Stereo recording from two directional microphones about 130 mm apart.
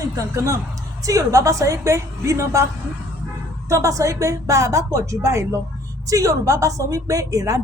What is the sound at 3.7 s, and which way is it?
Speech, 25° right (ahead or behind).